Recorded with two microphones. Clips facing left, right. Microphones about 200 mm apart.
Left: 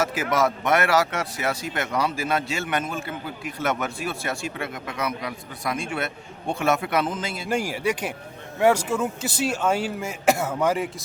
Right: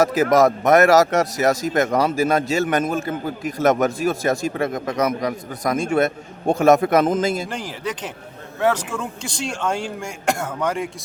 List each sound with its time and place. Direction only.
0.0 s a man's voice: 40° right (ahead or behind)
7.4 s speech: 10° left (ahead or behind)